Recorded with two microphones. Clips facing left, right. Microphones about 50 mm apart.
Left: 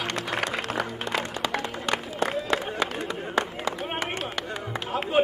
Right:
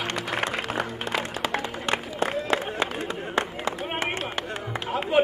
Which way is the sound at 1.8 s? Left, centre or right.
Right.